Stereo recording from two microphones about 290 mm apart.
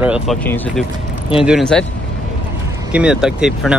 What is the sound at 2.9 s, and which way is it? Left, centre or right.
Speech, centre.